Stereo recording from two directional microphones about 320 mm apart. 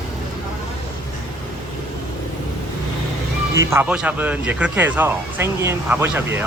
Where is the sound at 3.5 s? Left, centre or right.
Centre.